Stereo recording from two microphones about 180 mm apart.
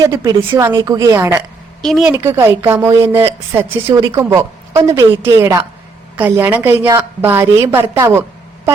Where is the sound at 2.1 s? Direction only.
20° right (ahead or behind).